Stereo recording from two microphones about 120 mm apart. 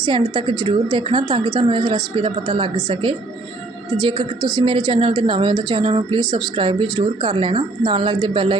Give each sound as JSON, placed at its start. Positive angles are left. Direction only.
{"t": 0.0, "sound": "a woman's voice", "side_deg": -40}